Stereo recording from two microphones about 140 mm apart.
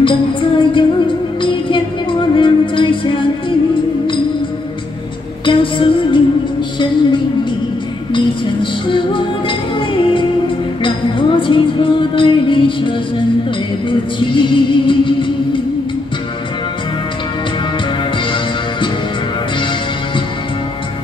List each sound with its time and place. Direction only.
0.0 s music: 35° left (ahead or behind)
5.4 s music: 35° left (ahead or behind)
8.8 s music: 35° left (ahead or behind)